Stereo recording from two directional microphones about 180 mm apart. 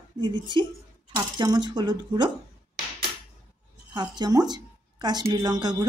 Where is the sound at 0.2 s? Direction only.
25° right (ahead or behind).